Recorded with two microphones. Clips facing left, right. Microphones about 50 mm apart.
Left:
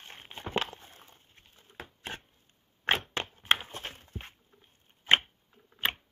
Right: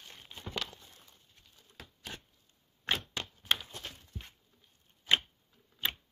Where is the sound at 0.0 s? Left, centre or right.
Left.